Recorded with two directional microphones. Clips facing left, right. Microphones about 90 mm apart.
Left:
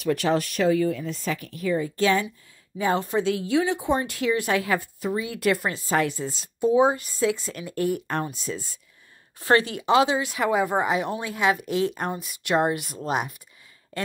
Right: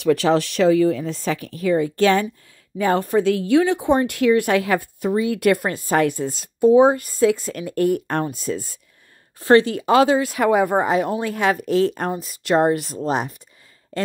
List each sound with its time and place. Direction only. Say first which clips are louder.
0.0 s speech: right 6 dB; 90° right; by 2.2 s 70° right (ahead or behind)
2.8 s speech: right 5 dB; 55° right (ahead or behind)
8.1 s speech: right 5 dB; 45° right (ahead or behind)
9.4 s speech: right 7 dB; 35° right (ahead or behind); by 10.8 s 55° right (ahead or behind)
10.8 s a woman's voice: right 5 dB; 35° right (ahead or behind)